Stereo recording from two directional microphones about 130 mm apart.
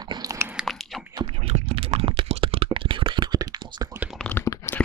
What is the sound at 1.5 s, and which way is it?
Computer keyboard, 45° right (ahead or behind).